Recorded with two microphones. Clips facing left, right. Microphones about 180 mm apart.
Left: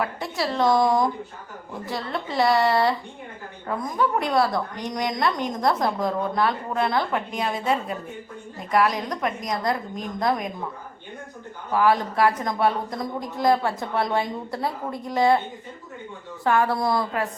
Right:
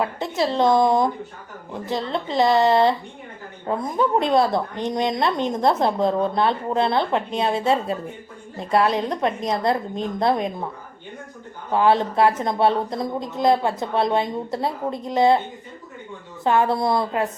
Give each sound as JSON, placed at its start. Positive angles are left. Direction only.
{"t": 0.0, "sound": "a woman's voice", "side_deg": -25}
{"t": 11.7, "sound": "a woman's voice", "side_deg": -25}
{"t": 16.4, "sound": "a woman's voice", "side_deg": -20}